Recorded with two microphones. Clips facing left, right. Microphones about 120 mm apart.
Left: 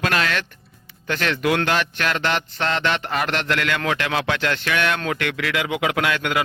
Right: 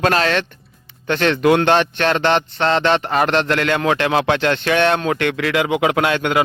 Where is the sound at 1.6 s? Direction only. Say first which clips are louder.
Right 7 dB; 30° right (ahead or behind).